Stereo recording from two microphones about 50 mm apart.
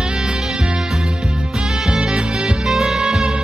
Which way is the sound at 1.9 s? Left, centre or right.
Centre.